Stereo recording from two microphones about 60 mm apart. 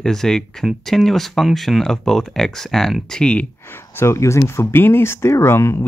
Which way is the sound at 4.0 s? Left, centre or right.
Left.